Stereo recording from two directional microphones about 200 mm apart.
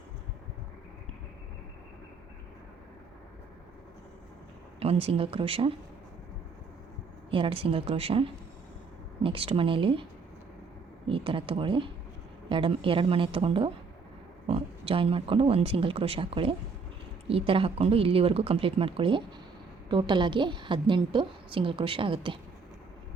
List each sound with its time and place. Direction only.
4.8 s a woman's voice: 30° right (ahead or behind)
7.3 s a woman's voice: 25° right (ahead or behind)